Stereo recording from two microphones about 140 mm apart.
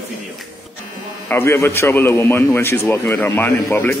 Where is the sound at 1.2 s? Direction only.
15° left (ahead or behind).